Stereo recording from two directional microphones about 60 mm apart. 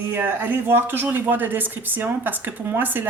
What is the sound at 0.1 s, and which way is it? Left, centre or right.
Speech, right.